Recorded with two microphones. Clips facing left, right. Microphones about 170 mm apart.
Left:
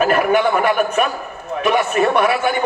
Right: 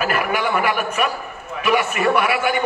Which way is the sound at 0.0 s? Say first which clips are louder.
Left 6 dB; 35° left (ahead or behind).